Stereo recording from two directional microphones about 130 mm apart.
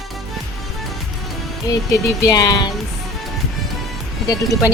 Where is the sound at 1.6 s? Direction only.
25° left (ahead or behind).